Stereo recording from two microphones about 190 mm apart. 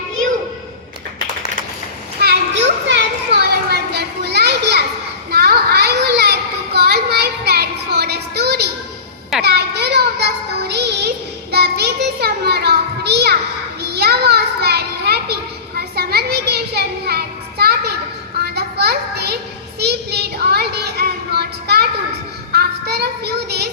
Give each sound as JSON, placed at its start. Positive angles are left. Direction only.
{"t": 2.2, "sound": "children playing", "side_deg": -60}
{"t": 9.4, "sound": "child singing", "side_deg": -60}
{"t": 11.5, "sound": "children playing", "side_deg": -60}
{"t": 15.8, "sound": "child singing", "side_deg": -55}
{"t": 18.3, "sound": "a sound", "side_deg": -60}
{"t": 19.8, "sound": "child singing", "side_deg": -60}